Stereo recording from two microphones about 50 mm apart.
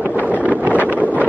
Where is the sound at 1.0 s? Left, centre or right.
Right.